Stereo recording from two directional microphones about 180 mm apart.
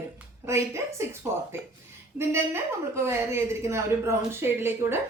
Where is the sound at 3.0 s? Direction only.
15° right (ahead or behind).